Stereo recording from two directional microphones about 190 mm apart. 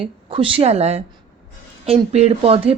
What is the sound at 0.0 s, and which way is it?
A woman's voice, 30° right (ahead or behind).